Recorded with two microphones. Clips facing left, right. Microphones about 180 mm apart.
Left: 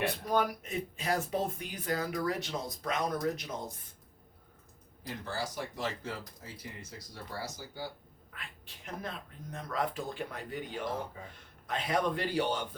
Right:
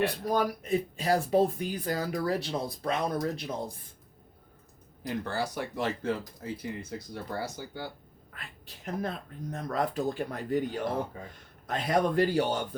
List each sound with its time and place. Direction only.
0.0 s speech: 35° right (ahead or behind)
5.0 s speech: 60° right (ahead or behind)
8.3 s a man's voice: 40° right (ahead or behind)